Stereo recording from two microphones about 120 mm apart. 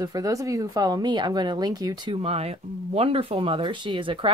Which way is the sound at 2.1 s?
55° right (ahead or behind).